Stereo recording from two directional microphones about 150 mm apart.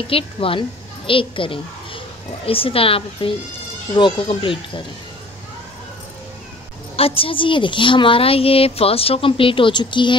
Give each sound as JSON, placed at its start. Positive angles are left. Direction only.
{"t": 0.1, "sound": "a child's voice", "side_deg": 35}
{"t": 7.0, "sound": "a woman's voice", "side_deg": 40}